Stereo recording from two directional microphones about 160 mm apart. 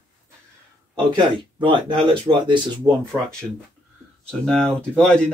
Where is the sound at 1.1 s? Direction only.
30° right (ahead or behind).